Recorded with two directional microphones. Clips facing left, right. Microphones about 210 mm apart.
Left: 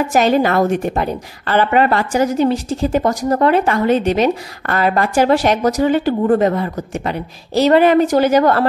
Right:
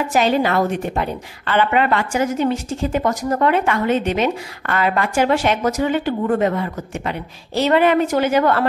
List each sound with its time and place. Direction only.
0.1 s a woman's voice: 45° left (ahead or behind)